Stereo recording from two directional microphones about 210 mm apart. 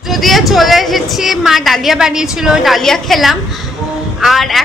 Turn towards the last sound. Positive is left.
turn(degrees=0)  # may be behind; listen again after turning